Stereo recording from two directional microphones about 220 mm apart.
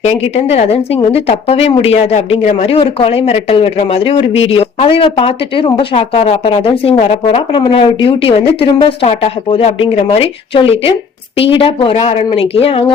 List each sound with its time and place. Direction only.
0.0 s speech: 30° left (ahead or behind)